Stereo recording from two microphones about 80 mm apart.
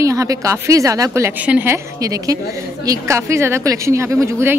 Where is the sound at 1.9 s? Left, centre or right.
Right.